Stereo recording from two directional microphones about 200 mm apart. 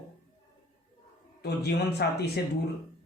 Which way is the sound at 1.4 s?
55° left (ahead or behind).